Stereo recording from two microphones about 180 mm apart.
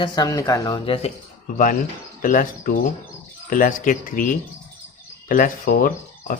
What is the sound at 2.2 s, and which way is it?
Speech, 50° left (ahead or behind).